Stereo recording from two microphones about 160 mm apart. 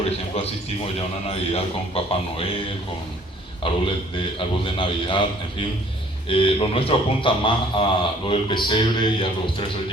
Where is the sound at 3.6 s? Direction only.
30° left (ahead or behind).